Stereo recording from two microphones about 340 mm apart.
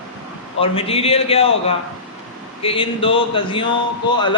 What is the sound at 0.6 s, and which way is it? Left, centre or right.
Speech, centre.